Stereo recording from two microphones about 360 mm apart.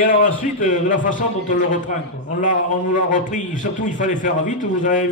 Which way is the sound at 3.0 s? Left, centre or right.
Left.